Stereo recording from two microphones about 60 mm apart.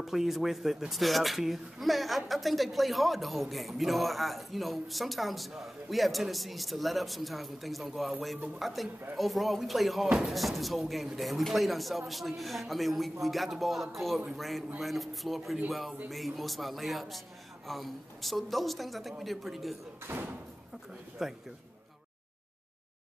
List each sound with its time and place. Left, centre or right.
0.0 s speech: centre
20.1 s speech: right
21.2 s speech: centre